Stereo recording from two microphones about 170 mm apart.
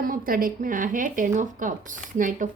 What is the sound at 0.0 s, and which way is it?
Speech, 55° right (ahead or behind).